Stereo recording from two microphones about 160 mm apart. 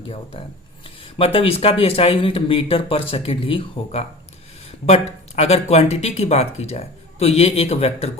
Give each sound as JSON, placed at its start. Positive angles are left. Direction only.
{"t": 0.0, "sound": "speech", "side_deg": 35}